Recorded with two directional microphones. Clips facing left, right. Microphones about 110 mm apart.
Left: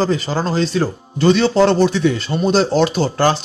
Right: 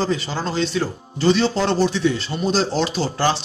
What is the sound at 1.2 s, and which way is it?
Speech, 65° left (ahead or behind).